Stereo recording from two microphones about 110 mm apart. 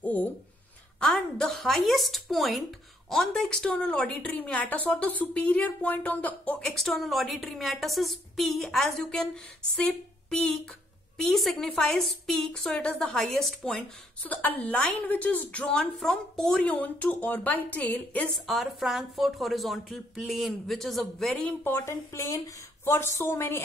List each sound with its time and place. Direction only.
0.0 s a woman's voice: 15° left (ahead or behind)
6.6 s a woman's voice: 5° left (ahead or behind)
18.5 s a woman's voice: centre (ahead or behind)
21.6 s speech: 25° left (ahead or behind)